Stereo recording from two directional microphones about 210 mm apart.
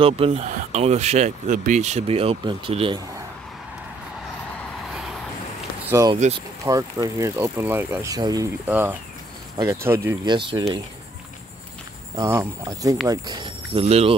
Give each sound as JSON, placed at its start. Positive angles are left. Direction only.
{"t": 0.0, "sound": "speech", "side_deg": -30}
{"t": 5.9, "sound": "speech", "side_deg": -15}
{"t": 12.2, "sound": "speech", "side_deg": -15}